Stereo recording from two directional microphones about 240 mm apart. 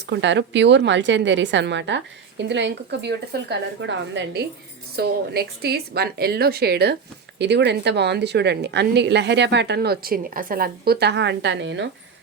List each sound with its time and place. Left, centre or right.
0.0 s a woman's voice: right